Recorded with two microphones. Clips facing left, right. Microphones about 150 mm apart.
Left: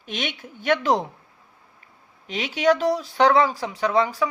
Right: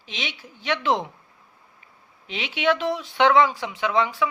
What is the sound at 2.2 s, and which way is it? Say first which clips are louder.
A woman's voice: left 3 dB; 40° left (ahead or behind).